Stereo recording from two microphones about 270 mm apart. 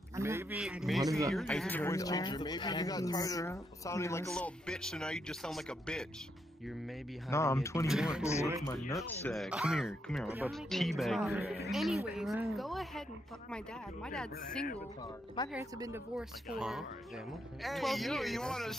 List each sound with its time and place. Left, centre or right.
0.1 s a man's voice: centre
7.2 s speech: centre
7.9 s speech: centre
14.0 s speech: centre
15.4 s speech: centre
15.8 s speech: centre